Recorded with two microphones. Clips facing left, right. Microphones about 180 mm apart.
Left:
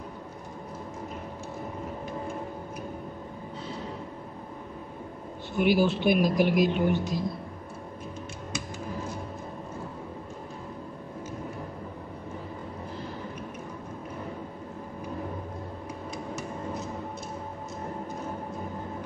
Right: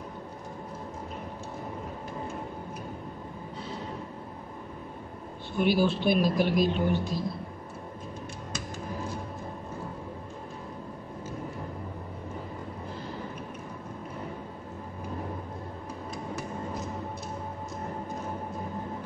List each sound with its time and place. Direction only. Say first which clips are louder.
5.6 s speech: left 2 dB; 15° left (ahead or behind)